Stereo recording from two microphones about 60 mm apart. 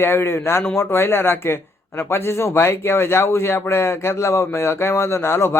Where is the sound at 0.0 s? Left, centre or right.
Left.